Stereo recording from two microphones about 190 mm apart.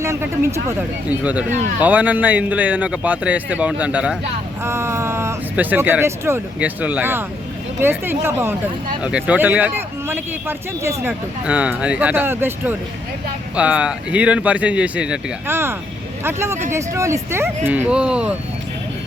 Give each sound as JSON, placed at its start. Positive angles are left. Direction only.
{"t": 0.0, "sound": "speech", "side_deg": -15}